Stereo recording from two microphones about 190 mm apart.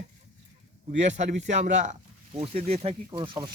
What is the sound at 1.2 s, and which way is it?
Speech, 40° right (ahead or behind).